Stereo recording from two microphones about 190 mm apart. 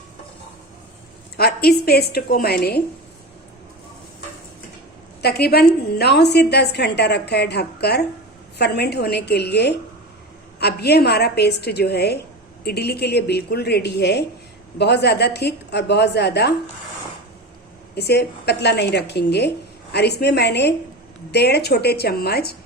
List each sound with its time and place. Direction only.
1.4 s a woman's voice: 55° left (ahead or behind)
5.2 s a woman's voice: 55° left (ahead or behind)
17.9 s a woman's voice: 60° left (ahead or behind)